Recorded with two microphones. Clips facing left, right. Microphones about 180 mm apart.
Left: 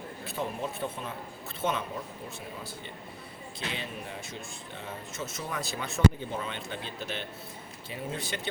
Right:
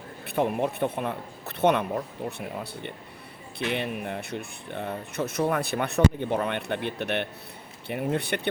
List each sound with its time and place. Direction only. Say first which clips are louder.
0.3 s speech: right 9 dB; 60° right (ahead or behind)
3.6 s speech: right 9 dB; 60° right (ahead or behind)